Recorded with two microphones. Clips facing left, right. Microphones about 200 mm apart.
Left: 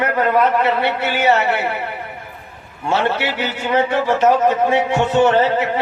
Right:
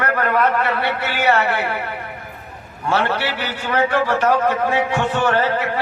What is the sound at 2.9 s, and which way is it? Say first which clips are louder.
A man's voice: left 2 dB; 25° left (ahead or behind).